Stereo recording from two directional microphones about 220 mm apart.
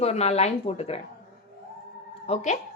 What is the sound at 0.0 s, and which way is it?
Speech, 30° left (ahead or behind).